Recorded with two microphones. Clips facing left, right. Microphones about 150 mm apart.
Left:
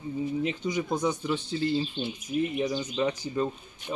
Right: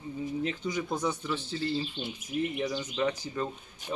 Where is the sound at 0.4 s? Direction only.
10° left (ahead or behind).